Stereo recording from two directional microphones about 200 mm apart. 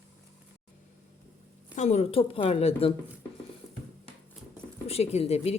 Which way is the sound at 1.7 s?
35° left (ahead or behind).